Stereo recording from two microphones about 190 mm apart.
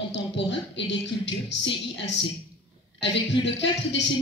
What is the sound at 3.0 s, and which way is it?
Speech, 70° left (ahead or behind).